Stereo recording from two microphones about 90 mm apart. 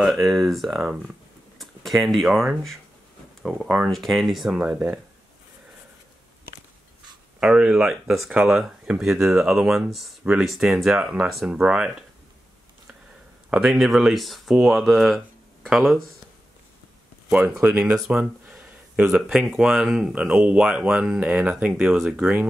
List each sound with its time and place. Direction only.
0.0 s speech: centre (ahead or behind)
4.6 s speech: 15° right (ahead or behind)
7.3 s speech: 10° right (ahead or behind)
13.7 s speech: centre (ahead or behind)
17.3 s speech: 20° right (ahead or behind)
17.7 s a sound: 10° right (ahead or behind)
19.0 s speech: 10° right (ahead or behind)